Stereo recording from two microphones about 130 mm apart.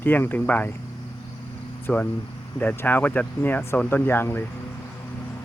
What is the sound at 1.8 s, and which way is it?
Speech, 10° left (ahead or behind).